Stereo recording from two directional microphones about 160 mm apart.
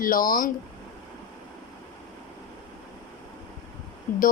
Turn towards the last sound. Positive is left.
turn(degrees=55)  # may be behind; listen again after turning